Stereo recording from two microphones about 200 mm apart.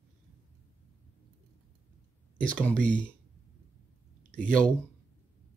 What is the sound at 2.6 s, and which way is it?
Speech, 5° left (ahead or behind).